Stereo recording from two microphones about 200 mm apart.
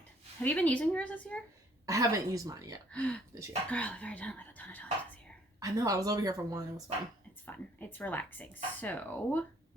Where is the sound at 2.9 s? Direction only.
5° left (ahead or behind).